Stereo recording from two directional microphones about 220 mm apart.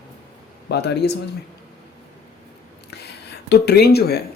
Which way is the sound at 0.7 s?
50° left (ahead or behind).